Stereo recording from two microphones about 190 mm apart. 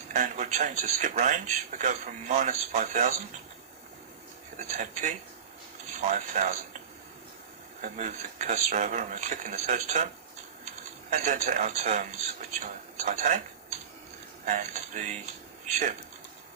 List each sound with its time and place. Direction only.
0.1 s speech: 40° right (ahead or behind)
4.5 s speech: 40° right (ahead or behind)
7.8 s speech: 40° right (ahead or behind)